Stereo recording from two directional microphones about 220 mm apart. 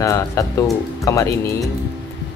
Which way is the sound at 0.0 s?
15° left (ahead or behind).